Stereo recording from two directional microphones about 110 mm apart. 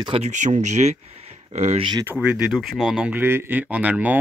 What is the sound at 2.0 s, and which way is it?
Speech, 20° right (ahead or behind).